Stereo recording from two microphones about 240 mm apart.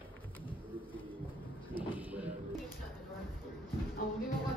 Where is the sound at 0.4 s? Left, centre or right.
Left.